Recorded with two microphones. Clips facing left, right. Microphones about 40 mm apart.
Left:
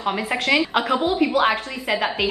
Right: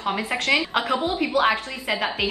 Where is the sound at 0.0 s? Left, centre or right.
Centre.